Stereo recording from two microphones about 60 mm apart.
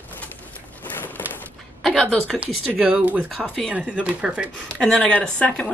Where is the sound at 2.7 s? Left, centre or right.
Centre.